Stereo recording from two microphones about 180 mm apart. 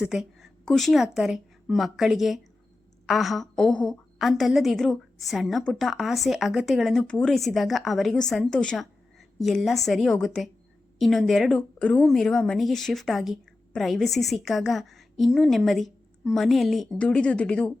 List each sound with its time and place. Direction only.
0.0 s a woman's voice: centre (ahead or behind)